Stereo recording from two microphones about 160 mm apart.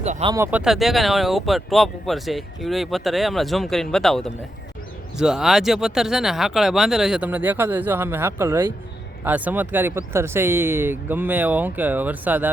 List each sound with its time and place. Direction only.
0.0 s speech: 45° right (ahead or behind)
0.3 s speech: 15° right (ahead or behind)
0.6 s speech: centre (ahead or behind)